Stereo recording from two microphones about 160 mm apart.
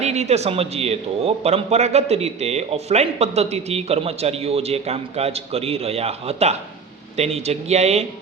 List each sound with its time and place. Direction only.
0.0 s a man's voice: 45° right (ahead or behind)